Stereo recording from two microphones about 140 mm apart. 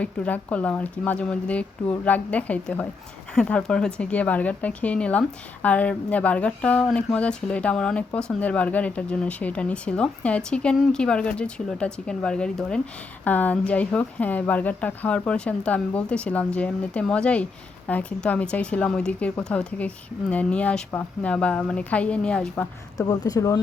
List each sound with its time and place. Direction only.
0.0 s speech: 10° left (ahead or behind)
23.0 s speech: 25° left (ahead or behind)